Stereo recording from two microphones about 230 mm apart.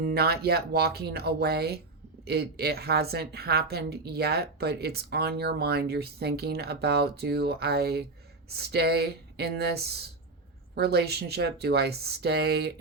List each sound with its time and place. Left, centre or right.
0.0 s a woman's voice: right